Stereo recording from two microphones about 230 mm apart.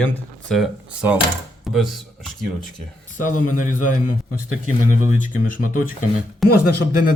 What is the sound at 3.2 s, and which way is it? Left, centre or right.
Speech, left.